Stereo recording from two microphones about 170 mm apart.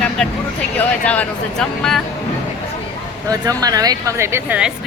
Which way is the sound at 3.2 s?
20° right (ahead or behind).